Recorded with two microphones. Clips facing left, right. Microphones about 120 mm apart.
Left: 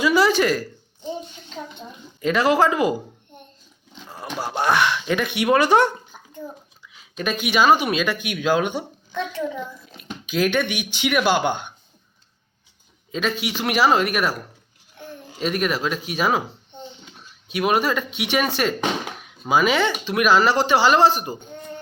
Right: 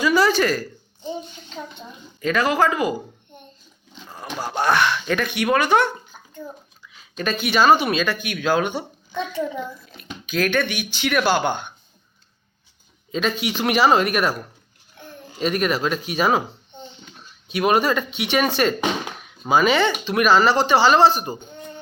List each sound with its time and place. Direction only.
0.0 s a sound: 20° left (ahead or behind)
2.2 s speech: 25° left (ahead or behind)
4.4 s speech: 5° left (ahead or behind); by 5.6 s 20° left (ahead or behind)
5.6 s speech: 35° left (ahead or behind)
6.8 s speech: 10° left (ahead or behind)
9.1 s a woman's voice: 5° right (ahead or behind)
10.0 s speech: 20° left (ahead or behind)
13.1 s speech: 5° left (ahead or behind)
15.4 s speech: 5° left (ahead or behind)
21.3 s speech: 15° right (ahead or behind)